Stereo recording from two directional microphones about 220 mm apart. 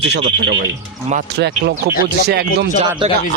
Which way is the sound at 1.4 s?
50° right (ahead or behind).